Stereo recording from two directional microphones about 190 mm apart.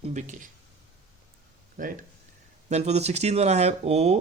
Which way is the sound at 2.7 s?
35° right (ahead or behind).